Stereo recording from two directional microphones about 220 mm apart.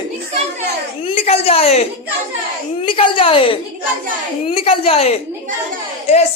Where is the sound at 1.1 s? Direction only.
25° left (ahead or behind).